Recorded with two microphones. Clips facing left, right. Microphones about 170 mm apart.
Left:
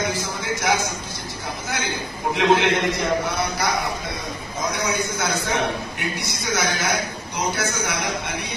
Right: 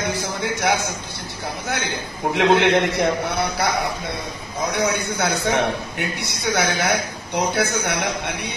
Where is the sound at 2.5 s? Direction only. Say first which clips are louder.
Right 3 dB; 65° right (ahead or behind).